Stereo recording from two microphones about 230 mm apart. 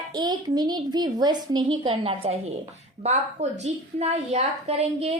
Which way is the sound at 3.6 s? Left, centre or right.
Right.